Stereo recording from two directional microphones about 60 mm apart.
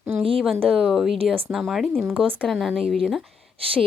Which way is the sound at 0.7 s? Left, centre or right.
Centre.